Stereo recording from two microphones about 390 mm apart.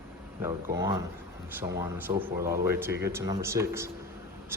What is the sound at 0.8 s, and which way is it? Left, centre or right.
Speech, centre.